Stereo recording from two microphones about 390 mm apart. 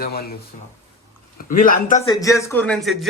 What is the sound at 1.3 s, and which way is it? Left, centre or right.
A man's voice, left.